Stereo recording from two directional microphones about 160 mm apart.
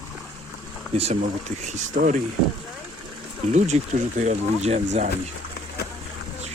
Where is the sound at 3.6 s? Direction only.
45° right (ahead or behind).